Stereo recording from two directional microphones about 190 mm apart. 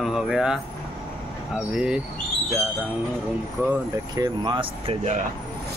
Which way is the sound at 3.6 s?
15° right (ahead or behind).